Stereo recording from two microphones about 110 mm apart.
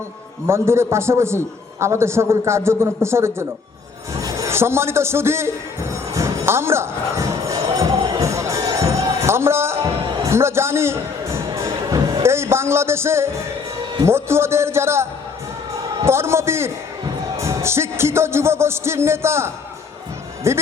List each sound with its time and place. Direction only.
0.4 s music: 25° right (ahead or behind)
4.1 s speech: 30° right (ahead or behind)
6.1 s music: 25° right (ahead or behind)
16.0 s music: 25° right (ahead or behind)